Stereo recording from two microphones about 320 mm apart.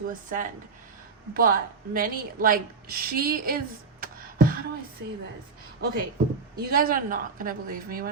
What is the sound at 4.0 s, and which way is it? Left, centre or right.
Beatboxing, right.